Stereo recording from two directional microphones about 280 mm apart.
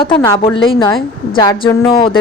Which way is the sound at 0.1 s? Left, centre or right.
Centre.